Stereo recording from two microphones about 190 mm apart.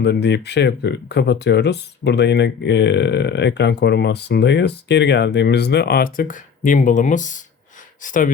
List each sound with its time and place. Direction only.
0.0 s speech: 60° left (ahead or behind); by 8.3 s 45° left (ahead or behind)